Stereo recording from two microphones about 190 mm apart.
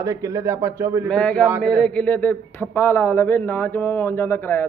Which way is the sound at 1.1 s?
5° left (ahead or behind).